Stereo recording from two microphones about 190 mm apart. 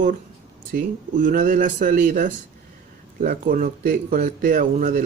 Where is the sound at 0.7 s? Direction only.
50° right (ahead or behind).